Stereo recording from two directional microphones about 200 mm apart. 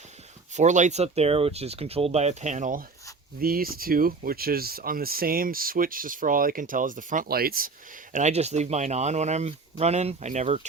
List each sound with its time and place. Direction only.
0.5 s speech: 35° right (ahead or behind)
8.1 s speech: 35° right (ahead or behind)